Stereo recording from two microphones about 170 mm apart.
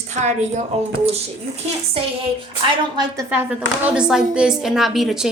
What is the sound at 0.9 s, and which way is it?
Speech, 35° right (ahead or behind).